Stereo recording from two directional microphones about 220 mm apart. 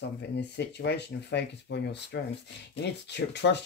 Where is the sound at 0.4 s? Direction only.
50° left (ahead or behind).